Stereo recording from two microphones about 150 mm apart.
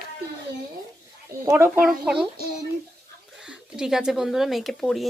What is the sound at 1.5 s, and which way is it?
Speech, 15° right (ahead or behind).